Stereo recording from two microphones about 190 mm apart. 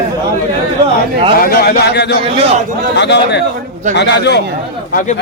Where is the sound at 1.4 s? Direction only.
55° left (ahead or behind).